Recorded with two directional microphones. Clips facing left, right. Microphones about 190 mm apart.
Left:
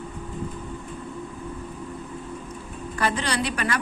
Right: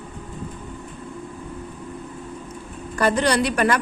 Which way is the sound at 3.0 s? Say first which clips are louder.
Right 6 dB; 45° right (ahead or behind).